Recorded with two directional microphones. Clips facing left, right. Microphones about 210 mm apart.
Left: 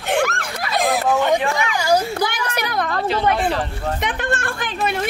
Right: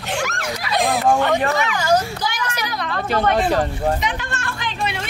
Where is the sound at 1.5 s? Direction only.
10° left (ahead or behind).